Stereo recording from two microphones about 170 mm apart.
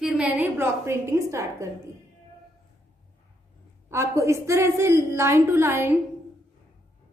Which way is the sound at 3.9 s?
15° right (ahead or behind).